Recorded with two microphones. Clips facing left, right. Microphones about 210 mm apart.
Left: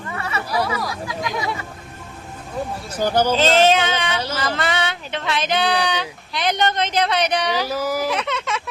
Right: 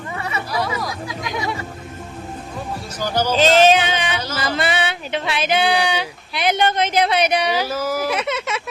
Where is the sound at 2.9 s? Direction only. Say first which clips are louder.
Left 3 dB; 55° left (ahead or behind).